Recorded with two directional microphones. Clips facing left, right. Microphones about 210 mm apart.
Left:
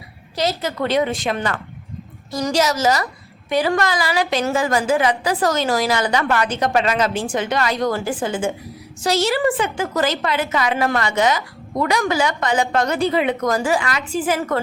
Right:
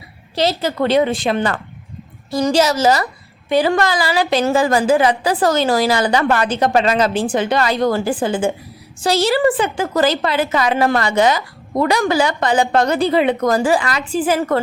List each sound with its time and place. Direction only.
0.3 s a woman's voice: 30° right (ahead or behind)